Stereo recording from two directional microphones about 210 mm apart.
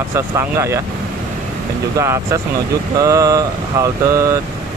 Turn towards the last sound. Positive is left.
turn(degrees=-15)  # may be behind; listen again after turning